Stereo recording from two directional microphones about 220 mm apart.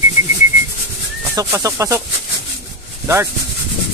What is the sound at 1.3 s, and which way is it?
Speech, 15° right (ahead or behind).